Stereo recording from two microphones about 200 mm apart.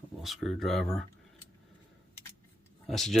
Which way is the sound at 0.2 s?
Centre (ahead or behind).